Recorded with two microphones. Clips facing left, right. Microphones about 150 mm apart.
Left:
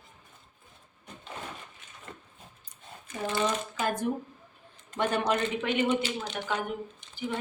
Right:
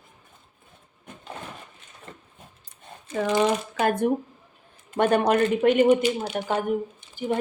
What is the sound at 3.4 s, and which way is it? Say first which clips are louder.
Speech: right 6 dB; 65° right (ahead or behind).